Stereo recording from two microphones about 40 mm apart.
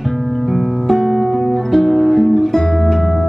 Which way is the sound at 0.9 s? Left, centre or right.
Centre.